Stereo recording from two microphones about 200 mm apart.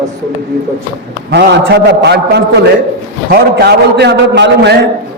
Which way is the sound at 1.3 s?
60° right (ahead or behind).